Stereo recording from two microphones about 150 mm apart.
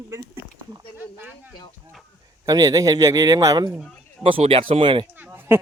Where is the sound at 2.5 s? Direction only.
25° right (ahead or behind).